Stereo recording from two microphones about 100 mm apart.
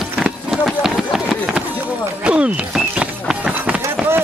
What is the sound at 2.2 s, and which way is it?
Run, 10° right (ahead or behind).